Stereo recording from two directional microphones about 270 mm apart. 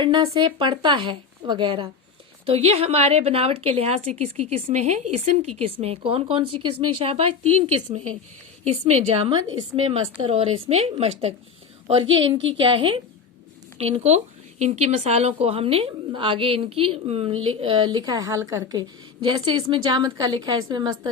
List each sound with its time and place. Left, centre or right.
0.0 s a woman's voice: centre